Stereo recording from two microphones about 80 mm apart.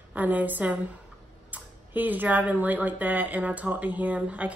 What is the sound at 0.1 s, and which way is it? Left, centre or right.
A woman's voice, right.